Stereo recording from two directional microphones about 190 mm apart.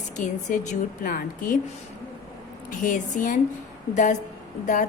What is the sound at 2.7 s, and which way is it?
Speech, 45° left (ahead or behind).